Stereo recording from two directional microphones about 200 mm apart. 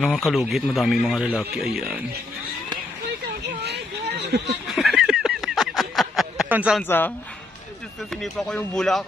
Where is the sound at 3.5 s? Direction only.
50° right (ahead or behind).